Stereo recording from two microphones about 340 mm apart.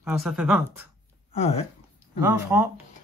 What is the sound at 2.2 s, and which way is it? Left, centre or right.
Speech, centre.